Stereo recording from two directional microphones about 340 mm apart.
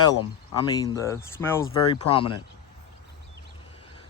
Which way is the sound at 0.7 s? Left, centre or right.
Centre.